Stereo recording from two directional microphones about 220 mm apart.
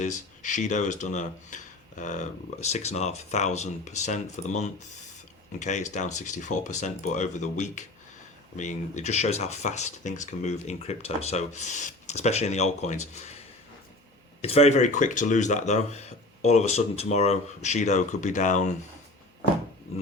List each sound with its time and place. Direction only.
0.0 s speech: 35° left (ahead or behind)
14.4 s speech: 30° left (ahead or behind)